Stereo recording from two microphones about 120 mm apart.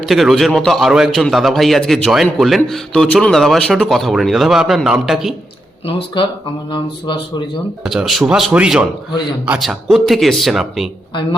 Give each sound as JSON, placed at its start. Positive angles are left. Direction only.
{"t": 0.0, "sound": "speech", "side_deg": 0}
{"t": 5.8, "sound": "speech", "side_deg": 45}
{"t": 7.9, "sound": "a man's voice", "side_deg": 0}